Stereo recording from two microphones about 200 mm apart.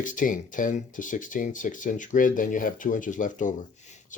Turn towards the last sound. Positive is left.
turn(degrees=40)  # may be behind; listen again after turning